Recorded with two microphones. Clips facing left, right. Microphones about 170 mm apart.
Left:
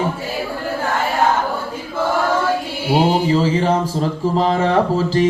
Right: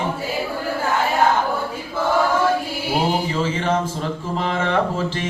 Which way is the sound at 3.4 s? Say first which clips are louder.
Left 4 dB; 35° left (ahead or behind).